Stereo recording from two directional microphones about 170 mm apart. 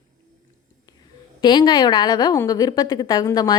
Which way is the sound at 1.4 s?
25° left (ahead or behind).